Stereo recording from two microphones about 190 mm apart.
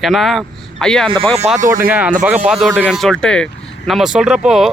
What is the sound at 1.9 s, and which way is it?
Speech, 10° right (ahead or behind).